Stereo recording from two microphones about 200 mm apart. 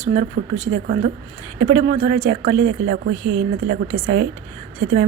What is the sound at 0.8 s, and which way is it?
Speech, 50° right (ahead or behind).